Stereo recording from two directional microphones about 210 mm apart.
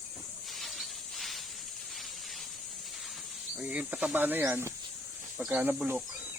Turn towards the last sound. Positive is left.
turn(degrees=-5)  # may be behind; listen again after turning